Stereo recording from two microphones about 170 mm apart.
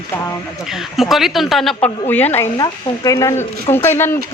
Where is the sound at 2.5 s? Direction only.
20° left (ahead or behind).